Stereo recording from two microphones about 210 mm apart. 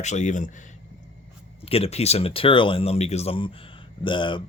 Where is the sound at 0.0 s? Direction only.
35° left (ahead or behind).